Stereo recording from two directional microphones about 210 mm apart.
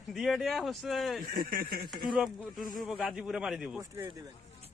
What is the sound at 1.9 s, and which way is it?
A man's voice, centre (ahead or behind).